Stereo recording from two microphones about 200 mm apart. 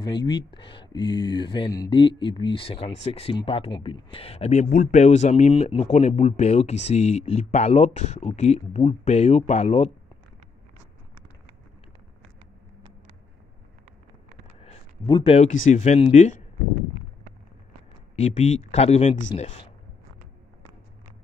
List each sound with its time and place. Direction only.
0.0 s speech: 20° left (ahead or behind)
14.6 s a sound: 25° left (ahead or behind)
15.6 s speech: 35° left (ahead or behind)
18.1 s speech: 35° left (ahead or behind)